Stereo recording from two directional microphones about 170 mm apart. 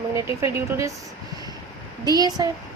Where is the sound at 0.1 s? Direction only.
15° right (ahead or behind).